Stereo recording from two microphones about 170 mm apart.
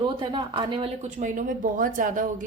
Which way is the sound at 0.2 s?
25° right (ahead or behind).